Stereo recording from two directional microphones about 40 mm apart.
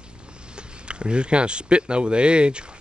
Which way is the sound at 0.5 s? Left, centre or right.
Right.